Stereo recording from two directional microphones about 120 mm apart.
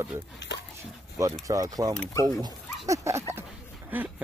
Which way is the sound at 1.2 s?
30° right (ahead or behind).